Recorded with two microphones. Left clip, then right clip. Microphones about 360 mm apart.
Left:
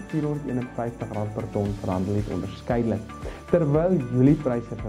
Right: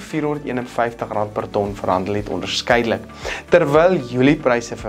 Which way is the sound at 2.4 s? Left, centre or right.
Centre.